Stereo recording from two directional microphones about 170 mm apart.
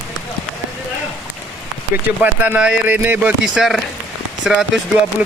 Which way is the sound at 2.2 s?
10° right (ahead or behind).